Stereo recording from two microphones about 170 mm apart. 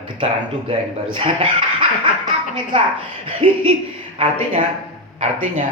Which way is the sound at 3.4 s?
30° right (ahead or behind).